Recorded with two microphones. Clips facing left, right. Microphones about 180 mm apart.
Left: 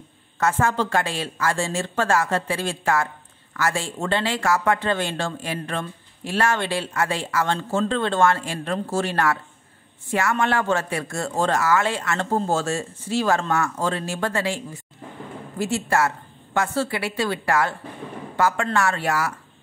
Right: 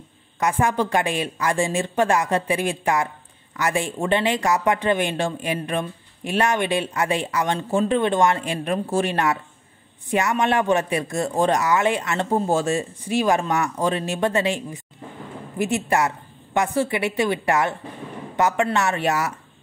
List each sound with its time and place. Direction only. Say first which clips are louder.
0.4 s a woman's voice: right 1 dB; 15° right (ahead or behind)